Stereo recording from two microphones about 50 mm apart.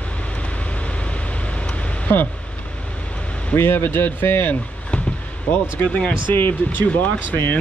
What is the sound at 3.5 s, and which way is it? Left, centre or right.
Speech, left.